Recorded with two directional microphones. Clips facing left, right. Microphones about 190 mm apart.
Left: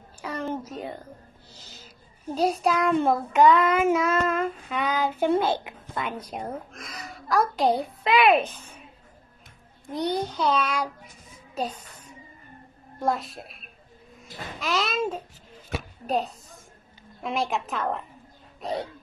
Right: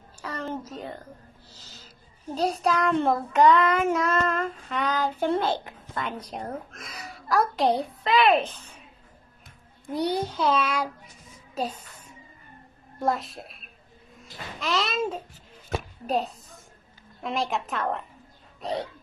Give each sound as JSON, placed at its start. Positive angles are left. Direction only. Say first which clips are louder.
{"t": 0.2, "sound": "a sound", "louder": "left 2 dB", "side_deg": 10}
{"t": 0.7, "sound": "music", "louder": "left 2 dB", "side_deg": 10}
{"t": 2.3, "sound": "child singing", "louder": "left 1 dB", "side_deg": 5}
{"t": 6.2, "sound": "a child's voice", "louder": "left 1 dB", "side_deg": 5}
{"t": 8.0, "sound": "child singing", "louder": "left 1 dB", "side_deg": 10}
{"t": 9.9, "sound": "a child's voice", "louder": "even", "side_deg": -5}
{"t": 13.0, "sound": "a child's voice", "louder": "even", "side_deg": 0}